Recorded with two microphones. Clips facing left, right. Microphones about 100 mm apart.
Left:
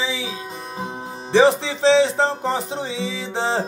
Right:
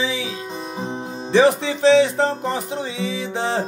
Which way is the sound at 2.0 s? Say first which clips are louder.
Even; 25° left (ahead or behind).